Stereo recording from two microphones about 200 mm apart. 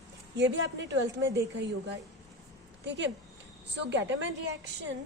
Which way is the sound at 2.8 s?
60° right (ahead or behind).